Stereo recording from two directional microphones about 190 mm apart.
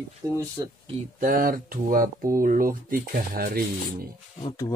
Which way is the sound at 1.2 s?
45° right (ahead or behind).